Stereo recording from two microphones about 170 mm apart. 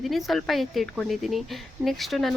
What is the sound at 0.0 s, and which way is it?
A woman's voice, centre (ahead or behind).